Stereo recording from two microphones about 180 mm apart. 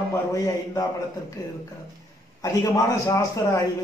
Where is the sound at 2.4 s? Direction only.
20° left (ahead or behind).